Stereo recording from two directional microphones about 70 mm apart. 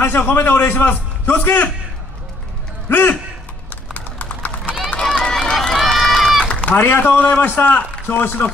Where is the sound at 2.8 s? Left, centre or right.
Left.